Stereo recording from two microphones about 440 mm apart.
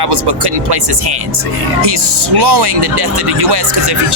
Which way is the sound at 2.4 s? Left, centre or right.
Right.